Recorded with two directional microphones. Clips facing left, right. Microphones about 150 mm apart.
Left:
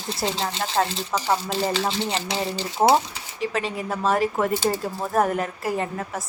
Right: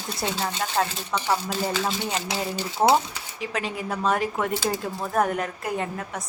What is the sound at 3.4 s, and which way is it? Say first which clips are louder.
A woman's voice: left 3 dB; centre (ahead or behind).